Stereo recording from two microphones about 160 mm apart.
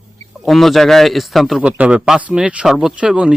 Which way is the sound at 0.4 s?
Centre (ahead or behind).